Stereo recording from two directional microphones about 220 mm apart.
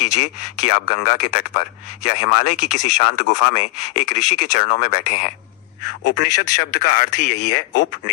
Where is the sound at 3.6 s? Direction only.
30° left (ahead or behind).